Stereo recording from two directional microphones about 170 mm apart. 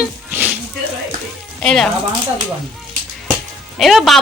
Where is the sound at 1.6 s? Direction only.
Centre (ahead or behind).